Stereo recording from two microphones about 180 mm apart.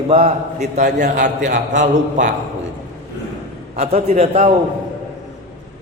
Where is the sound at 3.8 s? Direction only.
40° right (ahead or behind).